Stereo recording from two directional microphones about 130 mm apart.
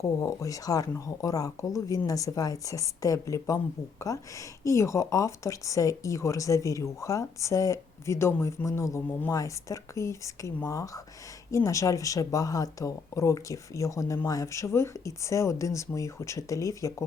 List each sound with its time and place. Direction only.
0.0 s speech: 25° left (ahead or behind)